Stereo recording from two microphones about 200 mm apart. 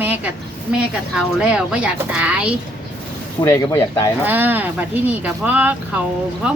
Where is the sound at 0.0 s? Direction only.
10° right (ahead or behind).